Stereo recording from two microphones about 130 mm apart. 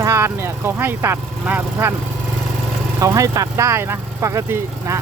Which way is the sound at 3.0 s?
25° right (ahead or behind).